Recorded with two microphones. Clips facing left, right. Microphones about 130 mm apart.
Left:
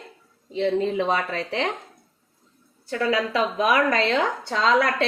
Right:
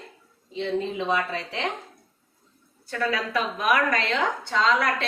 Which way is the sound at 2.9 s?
20° left (ahead or behind).